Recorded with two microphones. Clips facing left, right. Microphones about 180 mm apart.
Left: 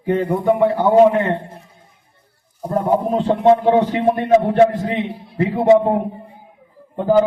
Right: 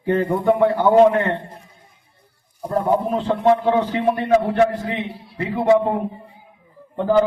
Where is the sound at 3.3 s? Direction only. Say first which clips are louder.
Left 4 dB; 25° left (ahead or behind).